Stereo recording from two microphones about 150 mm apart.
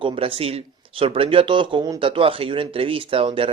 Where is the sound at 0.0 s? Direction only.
40° right (ahead or behind).